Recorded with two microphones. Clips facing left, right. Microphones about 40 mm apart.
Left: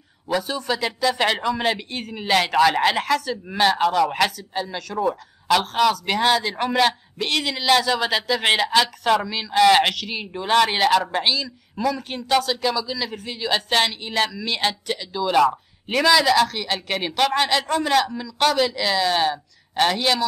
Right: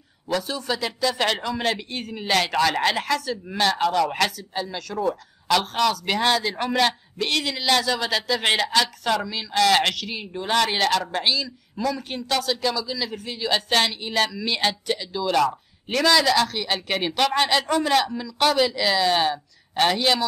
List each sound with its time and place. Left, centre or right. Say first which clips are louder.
0.3 s a man's voice: left 2 dB; centre
15.2 s speech: left 3 dB; centre